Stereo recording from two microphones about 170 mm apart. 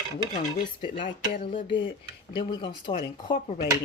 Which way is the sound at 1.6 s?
30° left (ahead or behind).